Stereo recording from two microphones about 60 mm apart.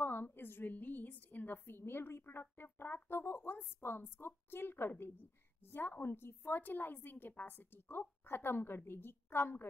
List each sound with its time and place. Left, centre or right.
0.0 s a woman's voice: left